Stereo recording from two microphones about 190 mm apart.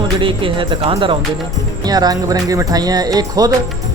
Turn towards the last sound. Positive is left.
turn(degrees=-20)  # may be behind; listen again after turning